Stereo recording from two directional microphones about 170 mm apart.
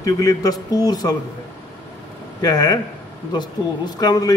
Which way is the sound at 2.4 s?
25° left (ahead or behind).